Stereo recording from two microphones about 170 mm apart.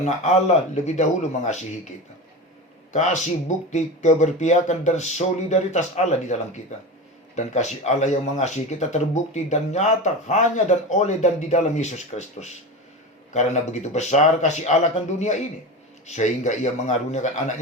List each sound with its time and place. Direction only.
0.0 s speech: 40° left (ahead or behind)
3.7 s speech: 45° left (ahead or behind)